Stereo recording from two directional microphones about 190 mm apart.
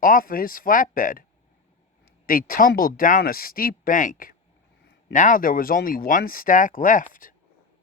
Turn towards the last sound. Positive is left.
turn(degrees=45)  # may be behind; listen again after turning